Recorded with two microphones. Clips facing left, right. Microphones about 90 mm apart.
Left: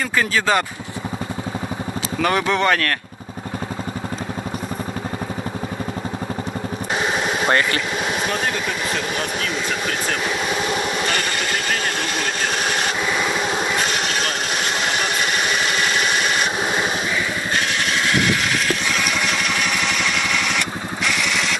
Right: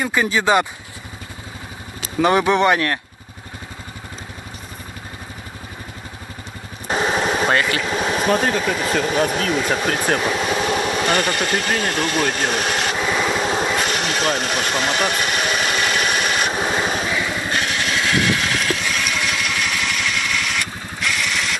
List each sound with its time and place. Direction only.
0.0 s speech: 15° right (ahead or behind)
2.1 s speech: 20° right (ahead or behind)
7.0 s vehicle: 35° right (ahead or behind)
7.4 s speech: 5° right (ahead or behind)
7.9 s speech: 30° right (ahead or behind)
9.6 s hair dryer: 40° right (ahead or behind)
10.2 s vehicle: 30° right (ahead or behind)
11.0 s speech: 35° right (ahead or behind)
12.9 s vehicle: 5° right (ahead or behind)
13.3 s vehicle: 25° right (ahead or behind)
13.8 s engine: 35° right (ahead or behind)
15.1 s engine: 30° left (ahead or behind)
15.6 s engine: 40° right (ahead or behind)
16.1 s vehicle: 30° left (ahead or behind)